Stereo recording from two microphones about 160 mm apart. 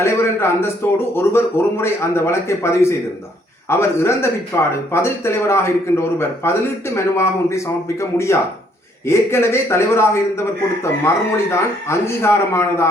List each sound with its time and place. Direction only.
0.0 s a man's voice: 15° left (ahead or behind)